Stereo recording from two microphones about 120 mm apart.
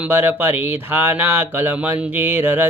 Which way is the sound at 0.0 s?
20° right (ahead or behind).